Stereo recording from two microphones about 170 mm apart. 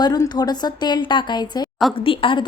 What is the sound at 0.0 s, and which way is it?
A woman's voice, 25° left (ahead or behind).